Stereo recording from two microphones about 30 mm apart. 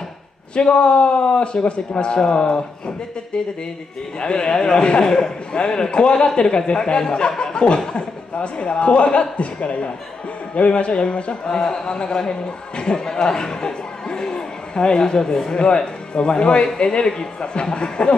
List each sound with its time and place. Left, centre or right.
0.6 s a man's voice: left
5.0 s speech: centre
5.6 s a man's voice: left